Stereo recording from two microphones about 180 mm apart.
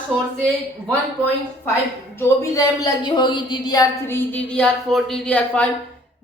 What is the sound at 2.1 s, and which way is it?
Speech, 15° left (ahead or behind).